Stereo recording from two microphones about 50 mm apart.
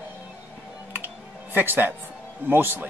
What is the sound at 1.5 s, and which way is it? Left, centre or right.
A man's voice, right.